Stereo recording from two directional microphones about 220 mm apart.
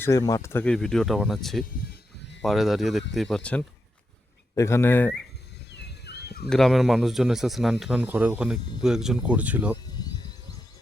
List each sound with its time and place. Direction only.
0.0 s speech: 15° left (ahead or behind)
6.1 s bird: 45° left (ahead or behind)
6.5 s speech: centre (ahead or behind)